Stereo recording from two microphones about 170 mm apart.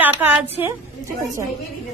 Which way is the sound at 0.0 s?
10° right (ahead or behind).